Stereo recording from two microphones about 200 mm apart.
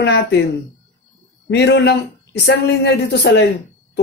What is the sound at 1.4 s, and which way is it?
Speech, 55° left (ahead or behind).